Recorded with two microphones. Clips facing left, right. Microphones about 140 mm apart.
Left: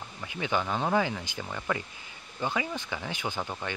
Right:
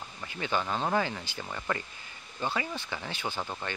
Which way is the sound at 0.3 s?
15° left (ahead or behind).